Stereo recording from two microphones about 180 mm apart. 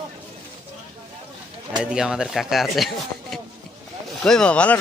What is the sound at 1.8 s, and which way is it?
Speech, 5° right (ahead or behind).